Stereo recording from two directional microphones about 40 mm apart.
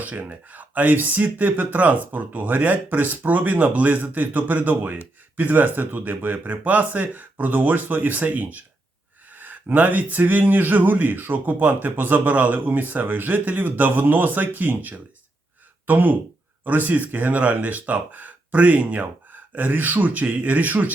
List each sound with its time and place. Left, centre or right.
0.0 s speech: right
13.4 s speech: right